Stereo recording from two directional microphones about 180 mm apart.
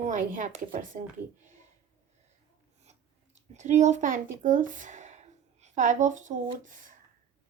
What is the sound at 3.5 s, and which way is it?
A woman's voice, 40° right (ahead or behind).